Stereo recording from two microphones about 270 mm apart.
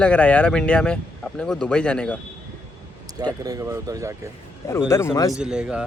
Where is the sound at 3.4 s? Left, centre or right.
Centre.